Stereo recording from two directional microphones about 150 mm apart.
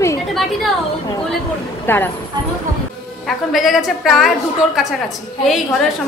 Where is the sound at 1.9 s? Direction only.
15° left (ahead or behind).